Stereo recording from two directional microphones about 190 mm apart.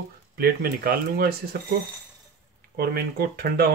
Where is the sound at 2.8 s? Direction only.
55° right (ahead or behind).